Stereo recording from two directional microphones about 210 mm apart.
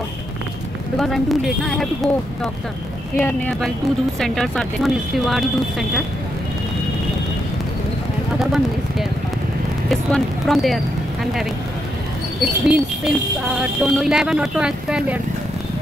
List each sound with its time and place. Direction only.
0.9 s speech: centre (ahead or behind)
3.2 s speech: 5° left (ahead or behind)
8.4 s speech: centre (ahead or behind)
12.4 s speech: centre (ahead or behind)